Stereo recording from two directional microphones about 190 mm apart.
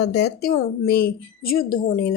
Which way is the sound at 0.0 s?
60° left (ahead or behind).